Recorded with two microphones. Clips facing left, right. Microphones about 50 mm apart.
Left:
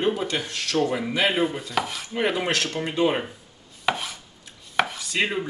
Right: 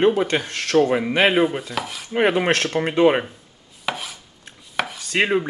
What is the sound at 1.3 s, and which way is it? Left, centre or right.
Chopping, right.